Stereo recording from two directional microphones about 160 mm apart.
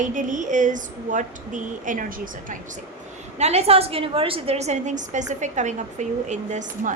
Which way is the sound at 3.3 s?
40° right (ahead or behind).